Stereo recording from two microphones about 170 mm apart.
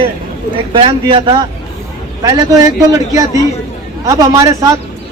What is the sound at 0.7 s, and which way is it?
Speech, 30° right (ahead or behind).